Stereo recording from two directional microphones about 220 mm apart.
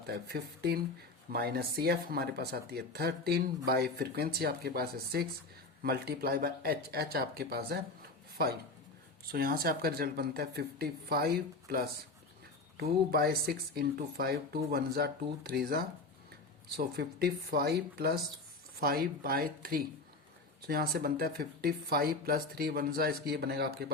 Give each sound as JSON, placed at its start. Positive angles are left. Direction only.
{"t": 0.1, "sound": "speech", "side_deg": -45}
{"t": 9.3, "sound": "speech", "side_deg": -40}